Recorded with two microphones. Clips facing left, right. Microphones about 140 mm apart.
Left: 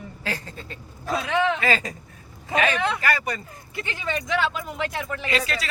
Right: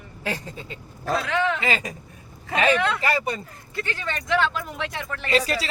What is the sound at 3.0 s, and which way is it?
Speech, 25° right (ahead or behind).